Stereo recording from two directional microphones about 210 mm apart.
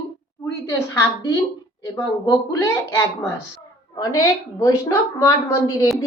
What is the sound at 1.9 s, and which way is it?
A woman's voice, 15° left (ahead or behind).